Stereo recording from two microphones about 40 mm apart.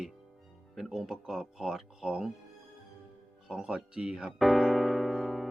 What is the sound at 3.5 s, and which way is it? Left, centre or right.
Speech, right.